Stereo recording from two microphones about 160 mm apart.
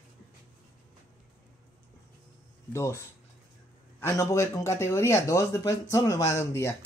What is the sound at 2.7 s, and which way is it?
Speech, 15° left (ahead or behind).